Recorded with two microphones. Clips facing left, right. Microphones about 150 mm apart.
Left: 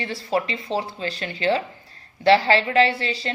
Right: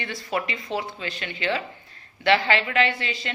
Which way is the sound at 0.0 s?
30° left (ahead or behind).